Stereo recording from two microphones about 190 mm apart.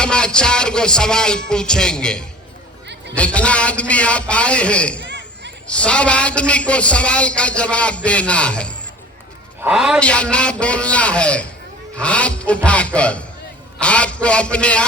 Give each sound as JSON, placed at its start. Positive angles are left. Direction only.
{"t": 0.0, "sound": "music", "side_deg": 5}
{"t": 3.2, "sound": "a man's voice", "side_deg": 5}
{"t": 5.0, "sound": "a sound", "side_deg": -65}
{"t": 5.6, "sound": "a man's voice", "side_deg": 5}
{"t": 13.7, "sound": "music", "side_deg": 5}